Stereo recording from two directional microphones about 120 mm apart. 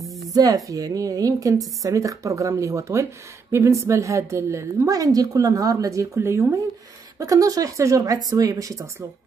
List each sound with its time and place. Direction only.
0.3 s a woman's voice: 30° right (ahead or behind)